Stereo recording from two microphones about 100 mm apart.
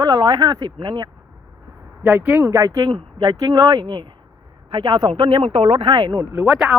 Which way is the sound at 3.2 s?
45° right (ahead or behind).